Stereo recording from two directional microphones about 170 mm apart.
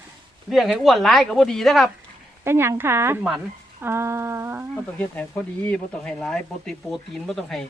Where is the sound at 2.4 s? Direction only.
15° right (ahead or behind).